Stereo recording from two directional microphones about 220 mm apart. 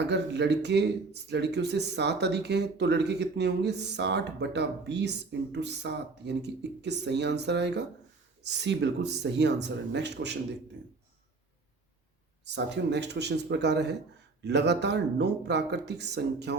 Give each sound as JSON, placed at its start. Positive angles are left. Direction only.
{"t": 0.0, "sound": "speech", "side_deg": -50}
{"t": 12.5, "sound": "speech", "side_deg": -50}